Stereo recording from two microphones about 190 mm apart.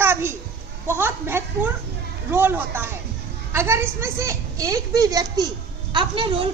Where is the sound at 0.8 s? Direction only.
10° right (ahead or behind).